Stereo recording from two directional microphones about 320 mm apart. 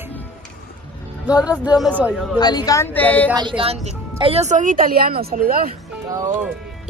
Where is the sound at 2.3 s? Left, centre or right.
Centre.